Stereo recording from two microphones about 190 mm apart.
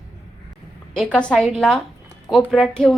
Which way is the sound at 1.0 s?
5° left (ahead or behind).